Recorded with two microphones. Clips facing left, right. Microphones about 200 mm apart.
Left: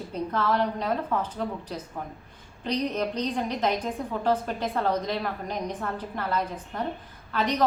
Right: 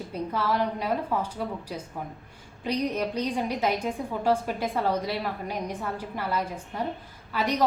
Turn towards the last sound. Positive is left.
turn(degrees=-10)  # may be behind; listen again after turning